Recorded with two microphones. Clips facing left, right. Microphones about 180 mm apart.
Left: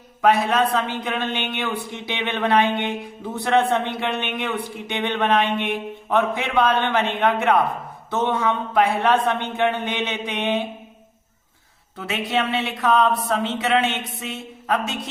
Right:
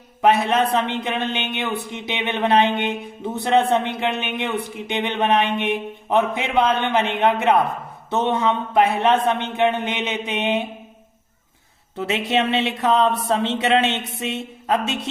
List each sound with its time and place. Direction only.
0.2 s speech: 25° right (ahead or behind)
11.9 s speech: 25° right (ahead or behind)